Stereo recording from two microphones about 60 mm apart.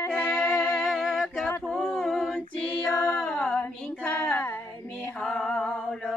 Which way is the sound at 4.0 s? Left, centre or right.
Left.